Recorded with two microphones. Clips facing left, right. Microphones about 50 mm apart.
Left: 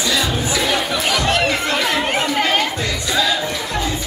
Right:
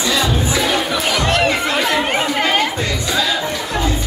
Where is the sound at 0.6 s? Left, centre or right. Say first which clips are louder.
Right 1 dB; centre.